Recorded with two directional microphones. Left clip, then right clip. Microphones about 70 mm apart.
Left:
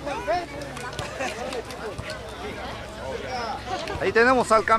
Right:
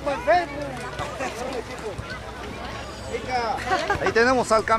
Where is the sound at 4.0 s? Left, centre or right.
Centre.